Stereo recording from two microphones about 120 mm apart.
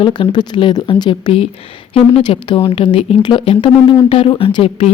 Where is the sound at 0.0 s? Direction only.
40° left (ahead or behind).